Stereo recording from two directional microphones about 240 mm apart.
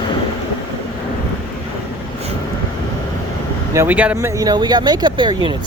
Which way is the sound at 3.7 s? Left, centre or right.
Centre.